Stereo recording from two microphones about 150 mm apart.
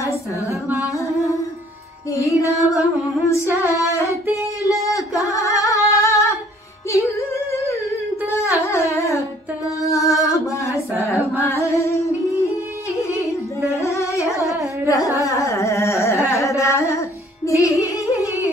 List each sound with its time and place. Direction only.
0.5 s music: 15° right (ahead or behind)
0.9 s music: 20° left (ahead or behind)
3.6 s female singing: 20° left (ahead or behind)
4.6 s a sound: 20° left (ahead or behind)
6.9 s singing: 20° left (ahead or behind)
8.3 s music: 20° left (ahead or behind)
9.8 s a sound: 20° left (ahead or behind)
11.0 s singing: 20° left (ahead or behind)
13.7 s music: 20° left (ahead or behind)
14.9 s carnatic music: 20° left (ahead or behind)
17.5 s music: 20° left (ahead or behind)